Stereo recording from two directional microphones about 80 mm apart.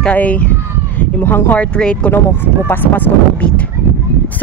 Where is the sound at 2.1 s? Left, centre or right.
Left.